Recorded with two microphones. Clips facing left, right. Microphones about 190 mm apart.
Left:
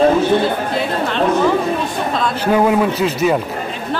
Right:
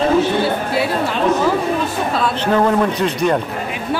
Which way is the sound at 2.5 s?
10° left (ahead or behind).